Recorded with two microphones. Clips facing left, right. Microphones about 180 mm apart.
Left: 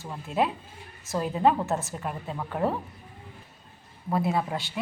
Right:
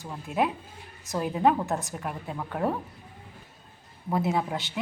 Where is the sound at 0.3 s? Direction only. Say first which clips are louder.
Even; 15° right (ahead or behind).